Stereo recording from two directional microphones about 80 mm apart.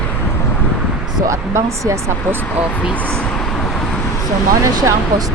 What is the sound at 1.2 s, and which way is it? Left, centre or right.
Speech, right.